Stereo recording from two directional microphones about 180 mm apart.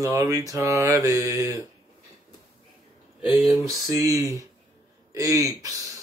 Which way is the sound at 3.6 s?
20° right (ahead or behind).